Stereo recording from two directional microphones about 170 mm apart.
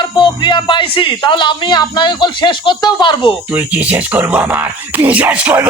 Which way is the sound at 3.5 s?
10° right (ahead or behind).